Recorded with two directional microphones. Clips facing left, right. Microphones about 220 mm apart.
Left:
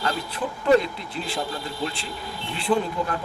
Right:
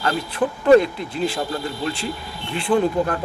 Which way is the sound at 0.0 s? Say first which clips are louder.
Right 6 dB; 50° right (ahead or behind).